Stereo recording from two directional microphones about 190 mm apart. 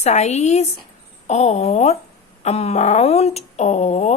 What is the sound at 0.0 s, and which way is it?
Speech, 35° left (ahead or behind).